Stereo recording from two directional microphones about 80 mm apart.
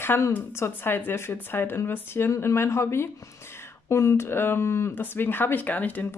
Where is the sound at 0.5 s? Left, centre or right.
Left.